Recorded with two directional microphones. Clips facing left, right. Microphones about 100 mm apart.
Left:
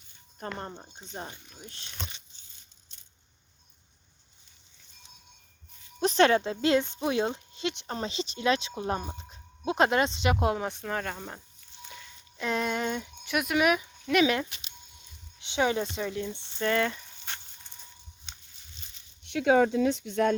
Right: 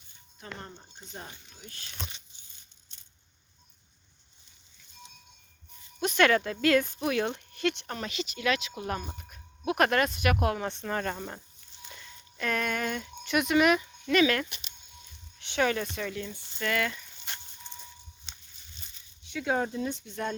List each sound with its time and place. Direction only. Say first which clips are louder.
0.5 s speech: left 5 dB; 35° left (ahead or behind)
6.0 s speech: left 2 dB; 30° left (ahead or behind)
7.9 s speech: left 2 dB; 30° left (ahead or behind)
10.6 s speech: even; 10° left (ahead or behind)
12.4 s speech: left 1 dB; 20° left (ahead or behind)
13.2 s speech: right 2 dB; 5° left (ahead or behind)
16.3 s speech: left 4 dB; 25° left (ahead or behind)
19.2 s speech: left 7 dB; 70° left (ahead or behind)